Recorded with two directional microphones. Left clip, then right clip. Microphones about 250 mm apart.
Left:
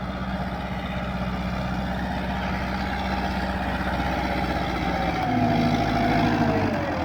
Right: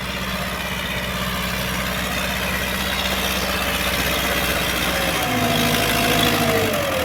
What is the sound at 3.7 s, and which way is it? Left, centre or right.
Vehicle, centre.